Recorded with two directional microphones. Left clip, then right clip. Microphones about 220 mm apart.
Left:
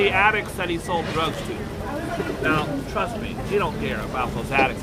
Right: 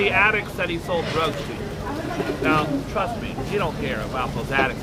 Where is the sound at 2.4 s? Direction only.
15° left (ahead or behind).